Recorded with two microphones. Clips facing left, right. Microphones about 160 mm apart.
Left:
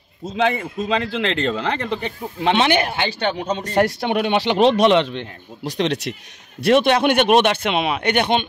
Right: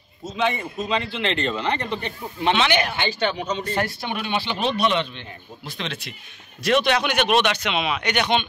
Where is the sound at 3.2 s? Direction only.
60° left (ahead or behind).